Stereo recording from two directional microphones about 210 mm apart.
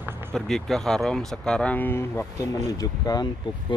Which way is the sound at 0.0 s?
10° right (ahead or behind).